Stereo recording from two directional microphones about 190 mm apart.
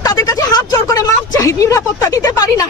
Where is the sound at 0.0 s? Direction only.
20° left (ahead or behind).